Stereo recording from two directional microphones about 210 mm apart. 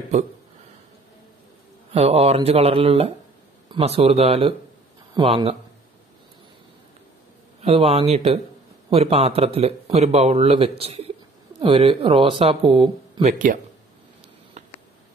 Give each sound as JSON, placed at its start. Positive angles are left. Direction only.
{"t": 1.9, "sound": "speech", "side_deg": -30}
{"t": 7.6, "sound": "speech", "side_deg": -30}
{"t": 13.2, "sound": "speech", "side_deg": -40}
{"t": 14.6, "sound": "a sound", "side_deg": -35}